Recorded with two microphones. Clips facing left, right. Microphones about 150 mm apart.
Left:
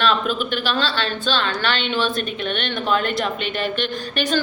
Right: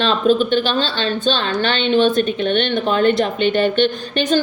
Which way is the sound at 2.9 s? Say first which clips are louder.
Right 5 dB; 30° right (ahead or behind).